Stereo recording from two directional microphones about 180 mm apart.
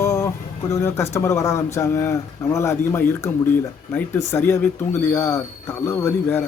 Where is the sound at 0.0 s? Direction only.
15° left (ahead or behind).